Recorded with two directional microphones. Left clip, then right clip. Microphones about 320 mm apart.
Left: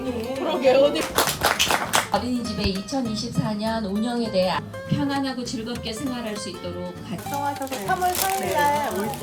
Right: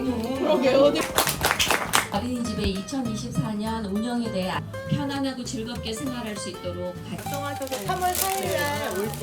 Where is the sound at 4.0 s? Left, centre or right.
Centre.